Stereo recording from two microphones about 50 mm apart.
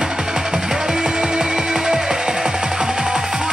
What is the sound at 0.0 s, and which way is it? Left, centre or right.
Music, centre.